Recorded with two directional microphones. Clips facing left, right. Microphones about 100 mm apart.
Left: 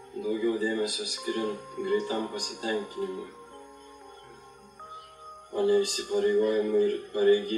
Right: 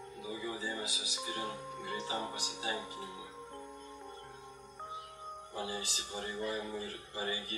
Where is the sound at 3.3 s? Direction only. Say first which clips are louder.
Left 1 dB; 10° right (ahead or behind).